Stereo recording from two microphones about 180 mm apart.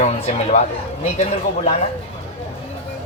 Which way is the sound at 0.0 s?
40° left (ahead or behind).